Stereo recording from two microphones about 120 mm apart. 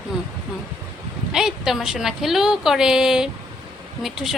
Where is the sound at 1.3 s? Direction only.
5° right (ahead or behind).